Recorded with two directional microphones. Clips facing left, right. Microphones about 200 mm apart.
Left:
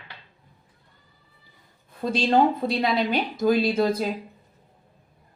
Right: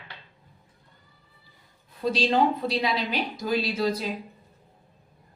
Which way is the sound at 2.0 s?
50° left (ahead or behind).